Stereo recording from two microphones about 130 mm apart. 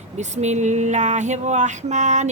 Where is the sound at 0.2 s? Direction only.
65° right (ahead or behind).